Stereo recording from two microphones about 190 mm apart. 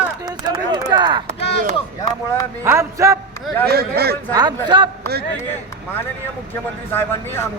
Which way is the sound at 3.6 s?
55° right (ahead or behind).